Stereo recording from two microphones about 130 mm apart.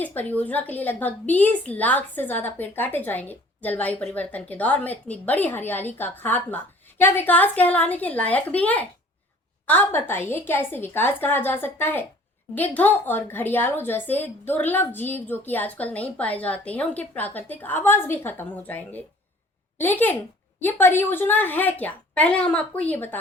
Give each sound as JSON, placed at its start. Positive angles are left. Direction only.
{"t": 0.0, "sound": "a woman's voice", "side_deg": 15}